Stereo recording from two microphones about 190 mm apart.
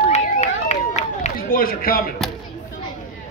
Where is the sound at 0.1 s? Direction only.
35° left (ahead or behind).